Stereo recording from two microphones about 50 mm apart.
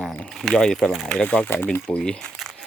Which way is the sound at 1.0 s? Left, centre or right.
Centre.